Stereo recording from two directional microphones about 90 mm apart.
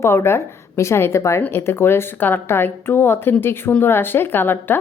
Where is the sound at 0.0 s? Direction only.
30° left (ahead or behind).